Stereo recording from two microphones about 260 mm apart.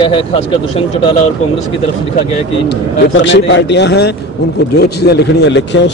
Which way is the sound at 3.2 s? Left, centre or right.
Left.